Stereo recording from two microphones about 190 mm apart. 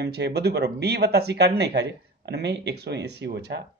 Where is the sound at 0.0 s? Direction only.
60° right (ahead or behind).